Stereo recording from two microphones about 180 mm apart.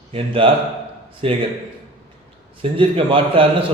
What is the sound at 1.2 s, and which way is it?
Speech, 30° right (ahead or behind).